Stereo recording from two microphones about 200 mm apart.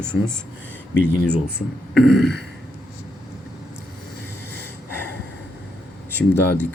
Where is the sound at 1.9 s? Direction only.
Centre (ahead or behind).